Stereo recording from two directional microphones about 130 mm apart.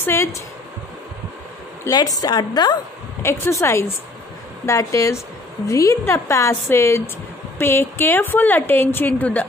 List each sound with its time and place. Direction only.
0.0 s a woman's voice: 20° left (ahead or behind)
1.9 s a woman's voice: 30° left (ahead or behind)
3.2 s a woman's voice: 20° left (ahead or behind)